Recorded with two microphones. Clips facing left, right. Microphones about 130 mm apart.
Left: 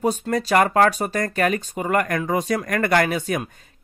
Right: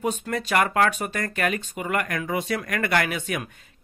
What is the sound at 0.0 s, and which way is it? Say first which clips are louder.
Speech: left 5 dB; 35° left (ahead or behind).